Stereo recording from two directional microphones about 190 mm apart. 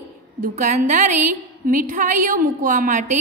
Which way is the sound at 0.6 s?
40° right (ahead or behind).